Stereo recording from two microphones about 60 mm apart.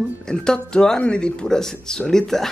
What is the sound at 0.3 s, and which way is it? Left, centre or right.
Speech, centre.